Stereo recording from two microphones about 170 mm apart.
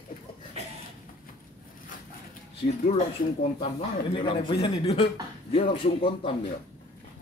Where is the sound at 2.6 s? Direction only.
45° left (ahead or behind).